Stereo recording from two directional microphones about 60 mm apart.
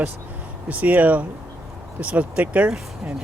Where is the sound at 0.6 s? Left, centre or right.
Right.